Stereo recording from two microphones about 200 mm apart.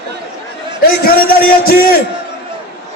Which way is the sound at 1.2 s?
50° left (ahead or behind).